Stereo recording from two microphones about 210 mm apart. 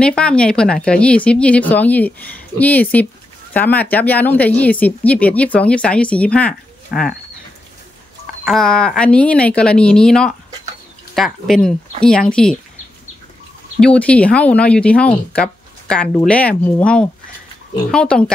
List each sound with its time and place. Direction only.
0.0 s speech: 5° left (ahead or behind)
8.5 s speech: centre (ahead or behind)
13.7 s speech: 5° left (ahead or behind)